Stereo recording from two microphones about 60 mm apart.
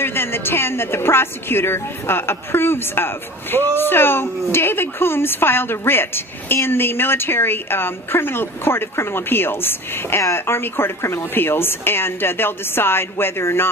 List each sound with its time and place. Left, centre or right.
0.0 s a woman's voice: left